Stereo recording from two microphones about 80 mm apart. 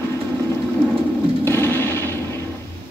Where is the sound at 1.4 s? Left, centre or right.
Left.